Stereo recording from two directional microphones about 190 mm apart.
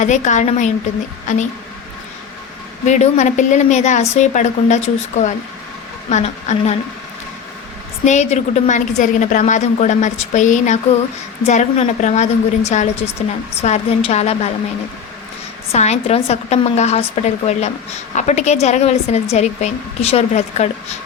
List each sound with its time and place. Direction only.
0.0 s a woman's voice: 40° left (ahead or behind)
2.8 s a woman's voice: 40° left (ahead or behind)
8.0 s a woman's voice: 35° left (ahead or behind)
15.7 s a woman's voice: 35° left (ahead or behind)